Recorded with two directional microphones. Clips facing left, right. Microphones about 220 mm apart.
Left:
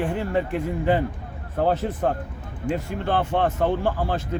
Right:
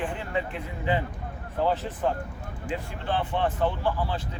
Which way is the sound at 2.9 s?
45° left (ahead or behind).